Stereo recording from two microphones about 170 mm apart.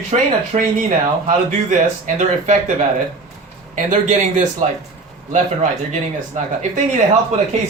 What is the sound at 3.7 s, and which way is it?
Speech, 45° right (ahead or behind).